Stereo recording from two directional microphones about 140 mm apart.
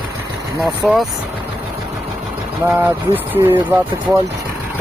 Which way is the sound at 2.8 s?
15° right (ahead or behind).